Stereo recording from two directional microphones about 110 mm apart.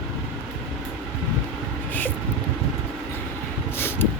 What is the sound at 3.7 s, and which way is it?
Vehicle, 20° left (ahead or behind).